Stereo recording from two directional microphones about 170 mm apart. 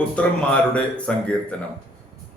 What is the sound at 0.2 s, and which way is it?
A man's voice, 5° left (ahead or behind).